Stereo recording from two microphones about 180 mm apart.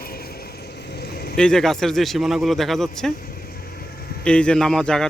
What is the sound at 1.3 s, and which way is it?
A man's voice, 5° left (ahead or behind).